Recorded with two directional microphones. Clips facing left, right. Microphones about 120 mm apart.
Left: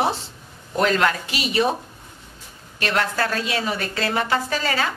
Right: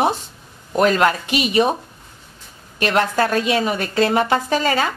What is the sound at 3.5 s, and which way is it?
A woman's voice, 25° right (ahead or behind).